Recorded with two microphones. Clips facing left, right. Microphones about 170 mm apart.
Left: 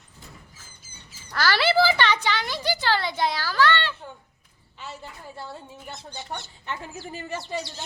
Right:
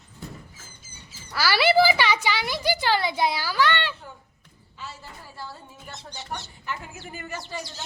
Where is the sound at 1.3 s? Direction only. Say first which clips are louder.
Right 1 dB; 10° right (ahead or behind).